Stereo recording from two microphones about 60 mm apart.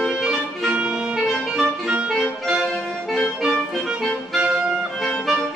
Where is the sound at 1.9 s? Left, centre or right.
Centre.